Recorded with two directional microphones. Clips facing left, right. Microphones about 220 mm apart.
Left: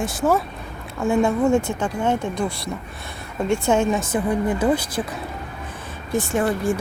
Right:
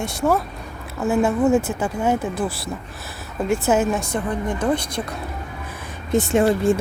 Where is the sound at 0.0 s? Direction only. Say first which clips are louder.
Even; centre (ahead or behind).